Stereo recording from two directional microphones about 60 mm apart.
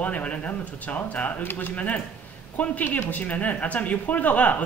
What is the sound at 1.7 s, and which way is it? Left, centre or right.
Speech, left.